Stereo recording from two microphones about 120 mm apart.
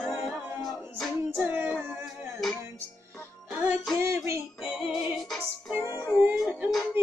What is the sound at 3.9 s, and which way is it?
Music, 25° right (ahead or behind).